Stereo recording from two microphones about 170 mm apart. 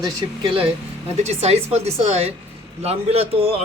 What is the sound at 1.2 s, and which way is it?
Speech, 40° right (ahead or behind).